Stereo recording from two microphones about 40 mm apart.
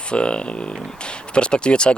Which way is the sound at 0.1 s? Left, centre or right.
Left.